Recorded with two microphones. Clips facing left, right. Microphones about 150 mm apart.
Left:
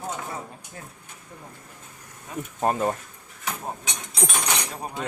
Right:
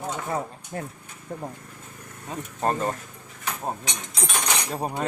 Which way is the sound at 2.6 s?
10° left (ahead or behind).